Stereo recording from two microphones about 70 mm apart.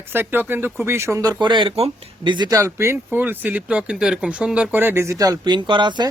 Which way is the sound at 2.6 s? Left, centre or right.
Right.